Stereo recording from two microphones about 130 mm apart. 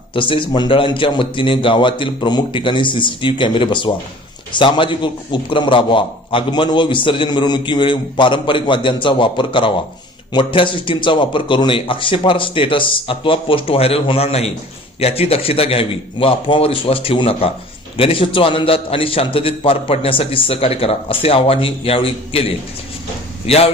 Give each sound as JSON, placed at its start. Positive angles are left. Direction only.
{"t": 0.1, "sound": "a man's voice", "side_deg": 40}
{"t": 23.5, "sound": "a man's voice", "side_deg": 50}